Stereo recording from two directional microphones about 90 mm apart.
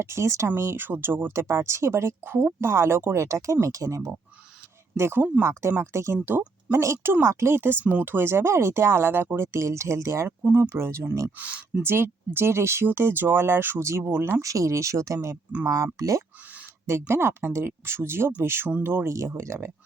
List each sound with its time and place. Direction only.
0.0 s speech: 30° right (ahead or behind)
10.4 s speech: 20° right (ahead or behind)
11.3 s speech: 15° right (ahead or behind)
11.8 s speech: 25° right (ahead or behind)